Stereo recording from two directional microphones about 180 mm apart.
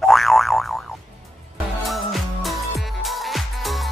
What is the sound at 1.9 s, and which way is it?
Music, centre (ahead or behind).